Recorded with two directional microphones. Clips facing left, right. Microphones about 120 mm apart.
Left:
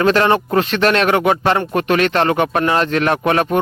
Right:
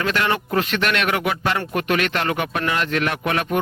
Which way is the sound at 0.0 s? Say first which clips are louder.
Left 8 dB; 35° left (ahead or behind).